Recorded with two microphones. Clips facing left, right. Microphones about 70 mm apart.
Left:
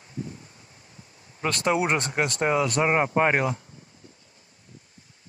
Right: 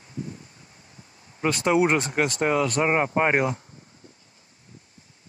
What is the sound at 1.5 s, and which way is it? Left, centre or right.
Speech, centre.